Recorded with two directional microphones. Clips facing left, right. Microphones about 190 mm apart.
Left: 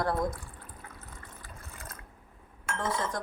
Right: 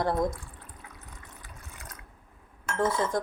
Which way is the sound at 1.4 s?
15° right (ahead or behind).